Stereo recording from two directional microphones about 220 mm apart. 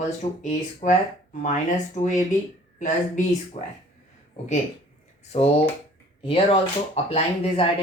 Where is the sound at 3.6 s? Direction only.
30° left (ahead or behind).